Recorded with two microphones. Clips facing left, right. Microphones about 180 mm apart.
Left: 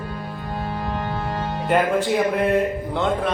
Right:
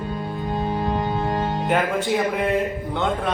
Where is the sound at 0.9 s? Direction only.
15° right (ahead or behind).